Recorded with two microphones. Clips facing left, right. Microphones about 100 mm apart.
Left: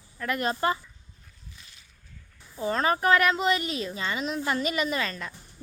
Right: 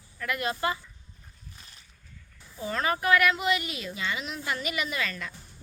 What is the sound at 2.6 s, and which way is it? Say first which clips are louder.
Speech: left 4 dB; 30° left (ahead or behind).